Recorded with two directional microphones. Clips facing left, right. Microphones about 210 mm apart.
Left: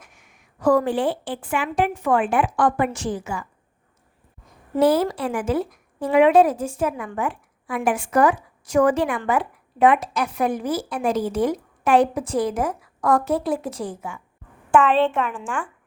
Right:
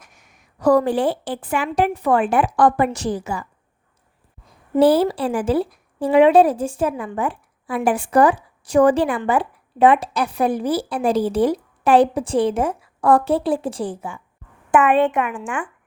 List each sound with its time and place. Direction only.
0.0 s speech: 40° right (ahead or behind)
4.8 s speech: 30° right (ahead or behind)
14.7 s a woman's voice: 15° right (ahead or behind)